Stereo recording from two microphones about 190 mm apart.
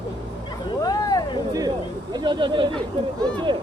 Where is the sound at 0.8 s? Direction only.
20° left (ahead or behind).